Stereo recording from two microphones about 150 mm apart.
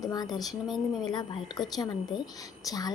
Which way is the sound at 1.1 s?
25° left (ahead or behind).